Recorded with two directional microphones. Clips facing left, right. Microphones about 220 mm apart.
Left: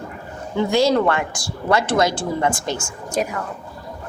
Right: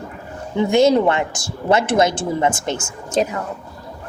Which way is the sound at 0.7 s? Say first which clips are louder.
Right 3 dB; 20° right (ahead or behind).